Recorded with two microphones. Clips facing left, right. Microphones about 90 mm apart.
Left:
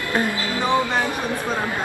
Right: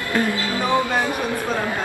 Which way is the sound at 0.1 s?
20° left (ahead or behind).